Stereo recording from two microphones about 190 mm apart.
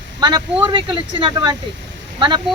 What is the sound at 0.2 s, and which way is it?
Speech, 25° right (ahead or behind).